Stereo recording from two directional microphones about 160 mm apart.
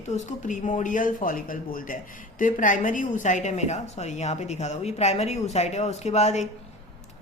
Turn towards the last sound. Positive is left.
turn(degrees=45)  # may be behind; listen again after turning